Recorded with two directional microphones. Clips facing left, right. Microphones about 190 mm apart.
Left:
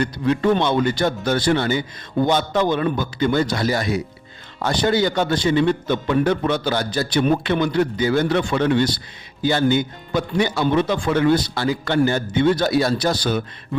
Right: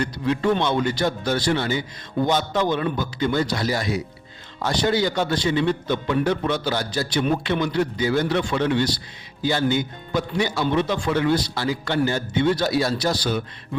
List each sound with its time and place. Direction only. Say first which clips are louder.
0.0 s a man's voice: left 3 dB; 55° left (ahead or behind)